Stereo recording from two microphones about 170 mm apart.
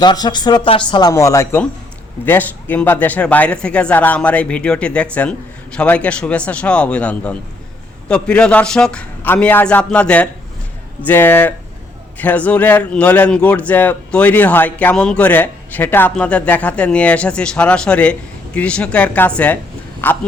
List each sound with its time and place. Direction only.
0.0 s a man's voice: 25° left (ahead or behind)